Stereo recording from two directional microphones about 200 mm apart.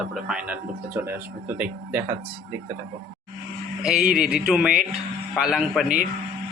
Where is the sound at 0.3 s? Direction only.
5° right (ahead or behind).